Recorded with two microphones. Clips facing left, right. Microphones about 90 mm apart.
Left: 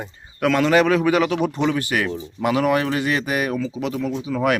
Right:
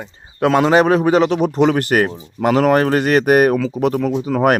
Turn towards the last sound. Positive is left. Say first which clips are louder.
# right 6 dB
turn(degrees=-50)  # may be behind; listen again after turning